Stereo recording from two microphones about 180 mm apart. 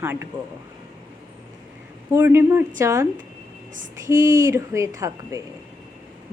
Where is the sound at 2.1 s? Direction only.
15° right (ahead or behind).